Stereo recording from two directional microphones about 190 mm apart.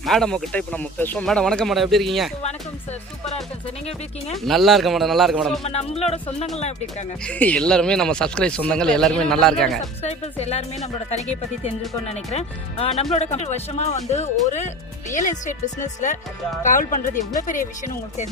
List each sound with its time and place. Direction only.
0.0 s speech: centre (ahead or behind)
4.4 s speech: centre (ahead or behind)
5.6 s speech: 35° left (ahead or behind)
7.3 s speech: 5° left (ahead or behind)
10.0 s speech: 35° left (ahead or behind)
12.1 s speech: 35° left (ahead or behind)